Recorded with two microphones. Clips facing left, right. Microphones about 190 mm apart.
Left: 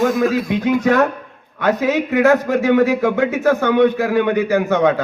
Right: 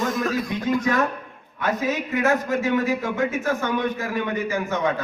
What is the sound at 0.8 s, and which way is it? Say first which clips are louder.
A man's voice: left 7 dB; 70° left (ahead or behind).